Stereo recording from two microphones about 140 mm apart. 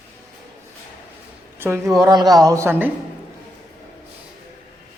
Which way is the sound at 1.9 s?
30° right (ahead or behind).